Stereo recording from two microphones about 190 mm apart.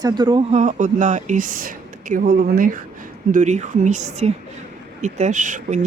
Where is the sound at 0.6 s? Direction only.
40° right (ahead or behind).